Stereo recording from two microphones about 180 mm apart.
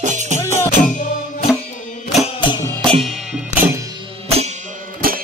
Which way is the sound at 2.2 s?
25° left (ahead or behind).